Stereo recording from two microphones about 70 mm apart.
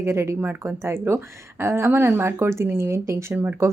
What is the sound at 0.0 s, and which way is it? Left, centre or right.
A woman's voice, right.